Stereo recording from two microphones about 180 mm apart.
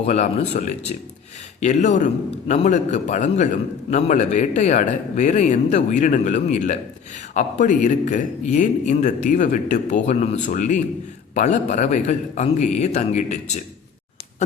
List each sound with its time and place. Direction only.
0.0 s a man's voice: 40° left (ahead or behind)